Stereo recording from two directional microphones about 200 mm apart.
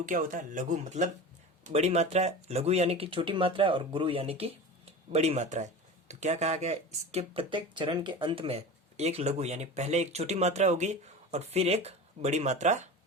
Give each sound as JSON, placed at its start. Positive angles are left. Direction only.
{"t": 0.0, "sound": "speech", "side_deg": -40}